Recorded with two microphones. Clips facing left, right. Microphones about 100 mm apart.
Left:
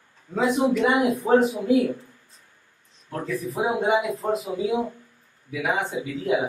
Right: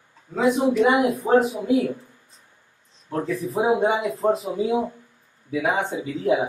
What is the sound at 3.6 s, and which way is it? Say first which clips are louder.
Speech: right 1 dB; 35° right (ahead or behind).